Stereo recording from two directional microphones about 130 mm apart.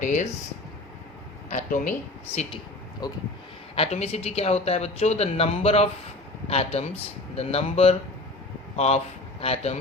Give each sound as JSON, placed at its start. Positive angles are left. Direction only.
{"t": 0.0, "sound": "speech", "side_deg": 75}
{"t": 1.5, "sound": "speech", "side_deg": 75}
{"t": 2.3, "sound": "speech", "side_deg": 55}
{"t": 3.0, "sound": "speech", "side_deg": 30}
{"t": 3.8, "sound": "speech", "side_deg": 50}